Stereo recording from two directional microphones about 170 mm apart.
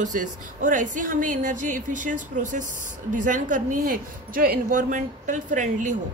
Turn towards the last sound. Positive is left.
turn(degrees=-45)  # may be behind; listen again after turning